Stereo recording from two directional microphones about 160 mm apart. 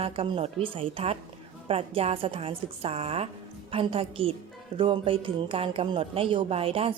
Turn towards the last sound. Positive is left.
turn(degrees=-35)  # may be behind; listen again after turning